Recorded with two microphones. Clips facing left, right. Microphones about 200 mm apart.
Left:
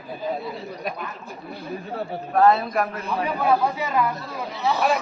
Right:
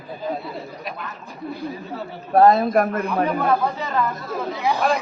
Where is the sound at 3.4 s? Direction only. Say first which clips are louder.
Even; 10° left (ahead or behind).